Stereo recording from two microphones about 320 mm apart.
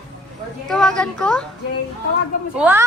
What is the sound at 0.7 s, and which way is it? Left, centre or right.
Speech, centre.